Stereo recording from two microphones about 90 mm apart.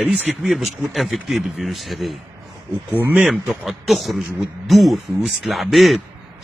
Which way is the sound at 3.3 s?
Centre (ahead or behind).